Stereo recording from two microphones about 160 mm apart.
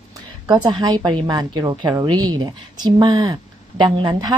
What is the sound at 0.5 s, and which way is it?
A woman's voice, 25° right (ahead or behind).